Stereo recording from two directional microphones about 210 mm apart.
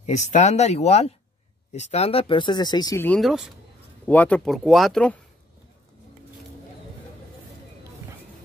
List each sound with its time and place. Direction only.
0.0 s speech: 35° left (ahead or behind); by 3.2 s 15° left (ahead or behind)
3.2 s speech: centre (ahead or behind)